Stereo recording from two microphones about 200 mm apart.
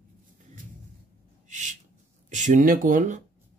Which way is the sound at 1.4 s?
35° right (ahead or behind).